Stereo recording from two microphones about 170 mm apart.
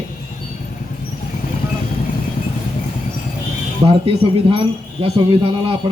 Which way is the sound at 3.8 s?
30° right (ahead or behind).